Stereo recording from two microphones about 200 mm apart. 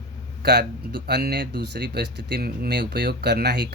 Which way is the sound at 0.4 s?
55° right (ahead or behind).